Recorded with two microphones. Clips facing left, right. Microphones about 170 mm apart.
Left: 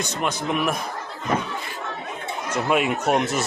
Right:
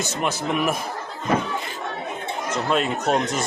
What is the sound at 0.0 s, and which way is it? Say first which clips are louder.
Speech: right 1 dB; 5° right (ahead or behind).